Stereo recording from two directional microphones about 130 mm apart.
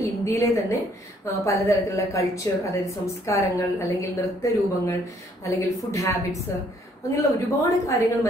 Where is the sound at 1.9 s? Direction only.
25° left (ahead or behind).